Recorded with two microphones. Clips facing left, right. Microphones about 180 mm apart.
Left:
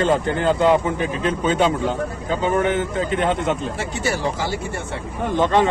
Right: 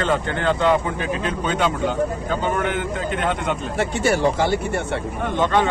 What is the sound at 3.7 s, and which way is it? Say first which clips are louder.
Speech: right 4 dB; 60° right (ahead or behind).